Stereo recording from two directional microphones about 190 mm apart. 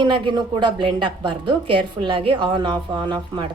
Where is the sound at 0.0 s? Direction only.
25° right (ahead or behind).